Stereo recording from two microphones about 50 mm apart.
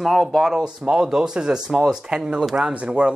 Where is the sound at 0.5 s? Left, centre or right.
Centre.